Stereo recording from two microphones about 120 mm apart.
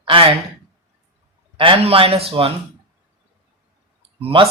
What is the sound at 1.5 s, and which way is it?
Speech, 50° right (ahead or behind).